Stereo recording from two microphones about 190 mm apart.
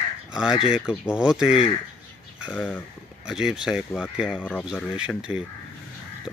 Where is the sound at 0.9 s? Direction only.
5° right (ahead or behind).